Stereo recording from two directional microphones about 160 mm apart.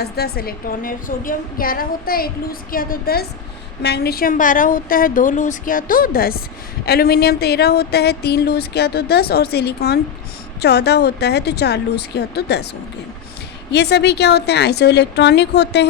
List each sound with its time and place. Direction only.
0.0 s a woman's voice: 75° left (ahead or behind)
3.8 s a woman's voice: 85° left; by 6.4 s 70° left (ahead or behind)
6.8 s a sound: 75° left (ahead or behind)
10.6 s a woman's voice: 90° left
13.7 s a woman's voice: 90° left